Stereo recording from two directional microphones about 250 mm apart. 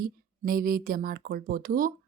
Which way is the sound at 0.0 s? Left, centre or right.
Right.